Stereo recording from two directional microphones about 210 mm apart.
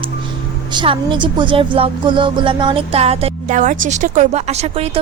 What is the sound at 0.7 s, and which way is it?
A woman's voice, 25° right (ahead or behind).